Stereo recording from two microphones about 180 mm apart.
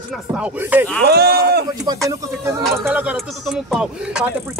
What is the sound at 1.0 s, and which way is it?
Speech, 60° right (ahead or behind).